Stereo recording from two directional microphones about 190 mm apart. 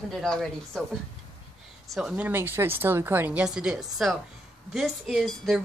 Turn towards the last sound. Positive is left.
turn(degrees=0)  # may be behind; listen again after turning